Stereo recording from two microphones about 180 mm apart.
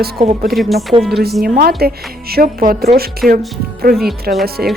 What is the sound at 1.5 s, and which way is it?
Speech, 55° right (ahead or behind).